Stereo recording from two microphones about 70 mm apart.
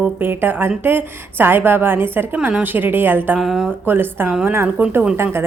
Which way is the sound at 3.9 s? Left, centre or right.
Right.